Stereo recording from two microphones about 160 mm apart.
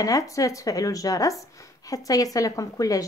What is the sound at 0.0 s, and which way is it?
Speech, 20° left (ahead or behind).